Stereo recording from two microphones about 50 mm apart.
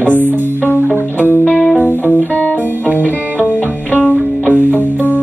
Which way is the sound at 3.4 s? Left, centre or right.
Right.